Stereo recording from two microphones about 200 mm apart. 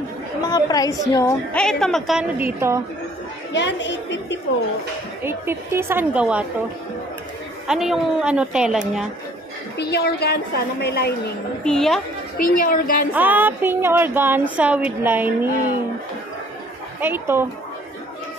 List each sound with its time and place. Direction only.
0.5 s a woman's voice: 20° left (ahead or behind)
1.5 s a woman's voice: 5° left (ahead or behind)
3.5 s a woman's voice: 60° left (ahead or behind)
5.2 s speech: 10° right (ahead or behind)
7.6 s a woman's voice: centre (ahead or behind)
9.8 s a woman's voice: 55° left (ahead or behind)
11.6 s a woman's voice: centre (ahead or behind)
12.4 s a woman's voice: 45° left (ahead or behind)
13.1 s speech: 10° right (ahead or behind)
17.0 s speech: 10° right (ahead or behind)